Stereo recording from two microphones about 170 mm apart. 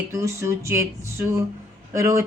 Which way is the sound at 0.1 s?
15° right (ahead or behind).